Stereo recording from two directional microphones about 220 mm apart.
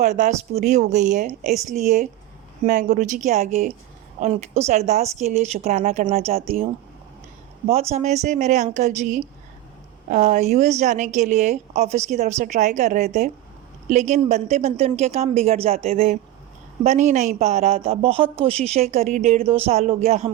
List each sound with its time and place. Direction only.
0.0 s a woman's voice: 30° right (ahead or behind)
7.7 s a woman's voice: 30° right (ahead or behind)